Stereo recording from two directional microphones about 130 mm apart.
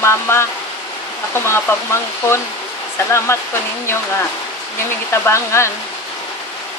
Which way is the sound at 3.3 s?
20° left (ahead or behind).